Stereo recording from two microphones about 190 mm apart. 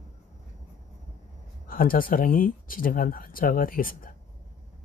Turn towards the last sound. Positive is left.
turn(degrees=50)  # may be behind; listen again after turning